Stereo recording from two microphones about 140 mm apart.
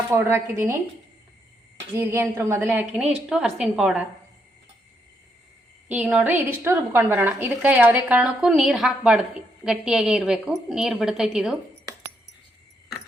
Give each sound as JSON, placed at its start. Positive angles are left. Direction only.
{"t": 0.1, "sound": "a woman's voice", "side_deg": -15}
{"t": 2.0, "sound": "a woman's voice", "side_deg": -15}
{"t": 5.9, "sound": "a woman's voice", "side_deg": -10}